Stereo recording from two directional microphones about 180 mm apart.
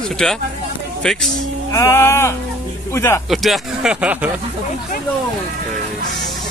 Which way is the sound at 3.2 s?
Centre (ahead or behind).